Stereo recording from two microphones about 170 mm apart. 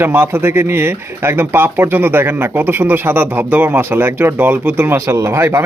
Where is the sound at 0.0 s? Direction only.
15° right (ahead or behind).